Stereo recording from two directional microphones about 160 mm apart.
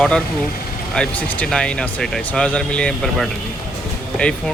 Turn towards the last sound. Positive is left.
turn(degrees=5)  # may be behind; listen again after turning